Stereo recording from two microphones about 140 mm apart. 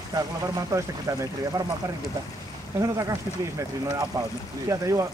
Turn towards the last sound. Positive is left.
turn(degrees=-25)  # may be behind; listen again after turning